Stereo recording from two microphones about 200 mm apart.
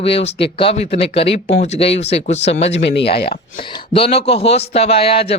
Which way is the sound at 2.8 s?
60° left (ahead or behind).